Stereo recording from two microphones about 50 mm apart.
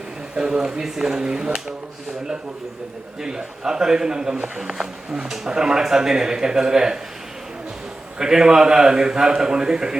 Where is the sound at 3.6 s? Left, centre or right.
Centre.